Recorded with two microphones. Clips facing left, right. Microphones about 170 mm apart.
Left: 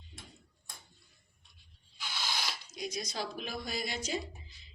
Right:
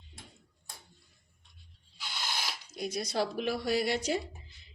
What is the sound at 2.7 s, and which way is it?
A woman's voice, 60° right (ahead or behind).